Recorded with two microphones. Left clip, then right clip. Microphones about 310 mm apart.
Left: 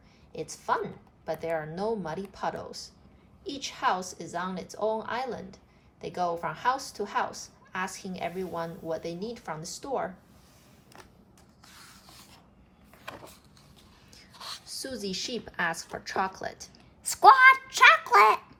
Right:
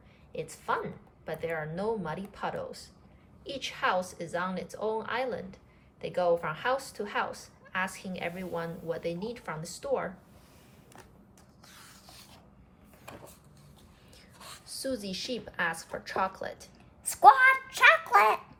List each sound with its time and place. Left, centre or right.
0.3 s a woman's voice: centre
11.6 s rub: centre
14.1 s a woman's voice: centre
17.0 s a child's voice: centre